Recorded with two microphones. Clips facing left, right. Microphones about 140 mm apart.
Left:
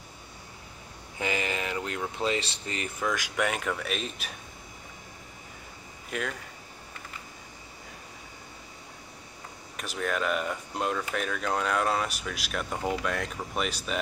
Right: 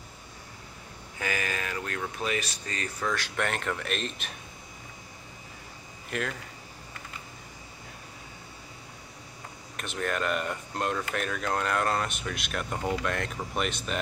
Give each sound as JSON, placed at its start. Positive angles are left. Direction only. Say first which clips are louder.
{"t": 1.1, "sound": "speech", "louder": "left 2 dB", "side_deg": 20}
{"t": 3.0, "sound": "speech", "louder": "left 2 dB", "side_deg": 10}
{"t": 6.0, "sound": "speech", "louder": "right 1 dB", "side_deg": 0}
{"t": 9.8, "sound": "speech", "louder": "even", "side_deg": 0}